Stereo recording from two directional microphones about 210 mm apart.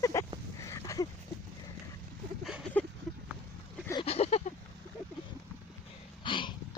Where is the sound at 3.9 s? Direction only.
25° left (ahead or behind).